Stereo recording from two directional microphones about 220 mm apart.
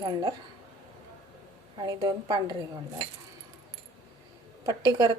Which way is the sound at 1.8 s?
20° right (ahead or behind).